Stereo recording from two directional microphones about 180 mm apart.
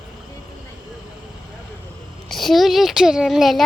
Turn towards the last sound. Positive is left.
turn(degrees=0)  # may be behind; listen again after turning